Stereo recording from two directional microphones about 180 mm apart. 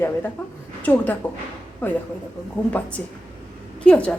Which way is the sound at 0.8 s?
10° left (ahead or behind).